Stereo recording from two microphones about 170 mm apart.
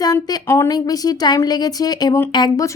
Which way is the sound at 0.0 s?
25° left (ahead or behind).